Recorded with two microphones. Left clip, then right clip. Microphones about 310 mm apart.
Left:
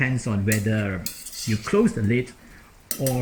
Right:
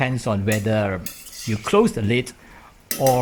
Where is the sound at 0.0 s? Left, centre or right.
Centre.